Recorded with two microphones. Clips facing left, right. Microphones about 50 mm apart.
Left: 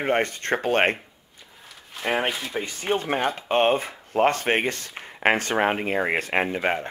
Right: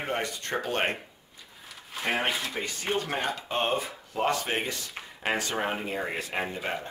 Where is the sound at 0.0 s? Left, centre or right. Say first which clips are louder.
Left 8 dB; left.